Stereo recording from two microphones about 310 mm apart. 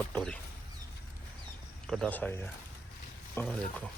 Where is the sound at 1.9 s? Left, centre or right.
Centre.